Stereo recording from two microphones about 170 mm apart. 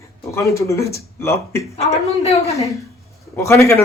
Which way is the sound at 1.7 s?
35° left (ahead or behind).